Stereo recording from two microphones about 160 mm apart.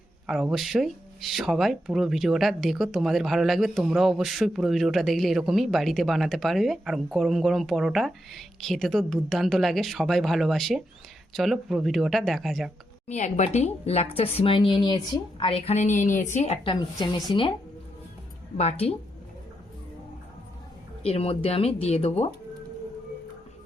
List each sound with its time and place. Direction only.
0.3 s speech: centre (ahead or behind)
13.1 s a woman's voice: 50° left (ahead or behind)
17.0 s speech: 25° left (ahead or behind)
18.5 s a woman's voice: 40° left (ahead or behind)
21.0 s a woman's voice: 40° left (ahead or behind)